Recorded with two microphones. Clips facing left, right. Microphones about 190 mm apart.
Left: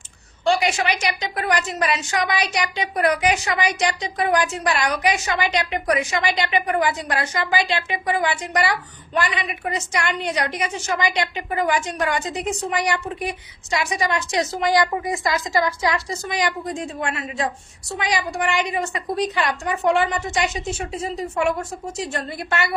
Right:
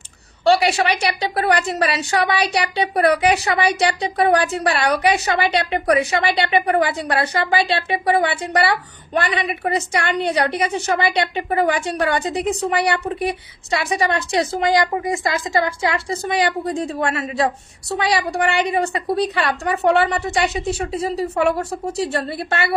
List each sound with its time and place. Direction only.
0.4 s a woman's voice: 35° right (ahead or behind)
10.7 s a woman's voice: 65° right (ahead or behind)
11.0 s a woman's voice: 35° right (ahead or behind)
14.7 s a woman's voice: 20° right (ahead or behind)